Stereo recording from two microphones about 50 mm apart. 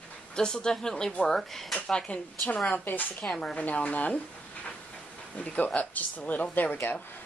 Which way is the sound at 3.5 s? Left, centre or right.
Left.